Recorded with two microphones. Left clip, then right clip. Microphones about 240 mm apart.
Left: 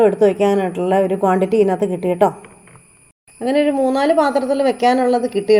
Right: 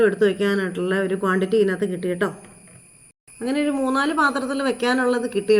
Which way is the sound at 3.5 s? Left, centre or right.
Centre.